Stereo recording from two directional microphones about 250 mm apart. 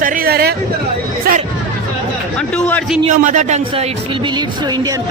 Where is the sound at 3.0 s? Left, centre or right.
Right.